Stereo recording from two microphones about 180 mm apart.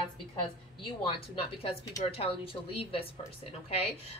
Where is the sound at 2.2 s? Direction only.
30° left (ahead or behind).